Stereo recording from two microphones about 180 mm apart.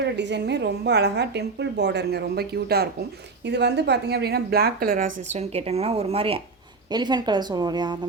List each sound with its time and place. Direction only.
0.0 s a woman's voice: 75° right (ahead or behind)
3.4 s a woman's voice: 70° right (ahead or behind); by 7.9 s 25° right (ahead or behind)